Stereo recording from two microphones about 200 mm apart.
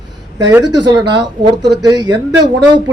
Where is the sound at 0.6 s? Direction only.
20° right (ahead or behind).